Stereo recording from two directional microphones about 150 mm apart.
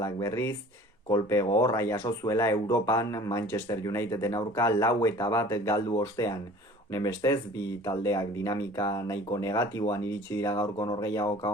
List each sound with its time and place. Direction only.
0.0 s speech: 20° left (ahead or behind)